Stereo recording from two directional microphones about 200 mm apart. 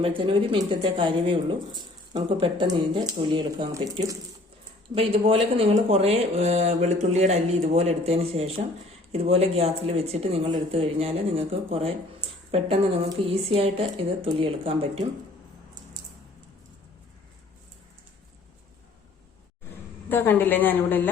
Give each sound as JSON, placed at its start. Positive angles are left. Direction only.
{"t": 0.0, "sound": "speech", "side_deg": -25}
{"t": 4.9, "sound": "speech", "side_deg": -30}
{"t": 20.1, "sound": "a woman's voice", "side_deg": 10}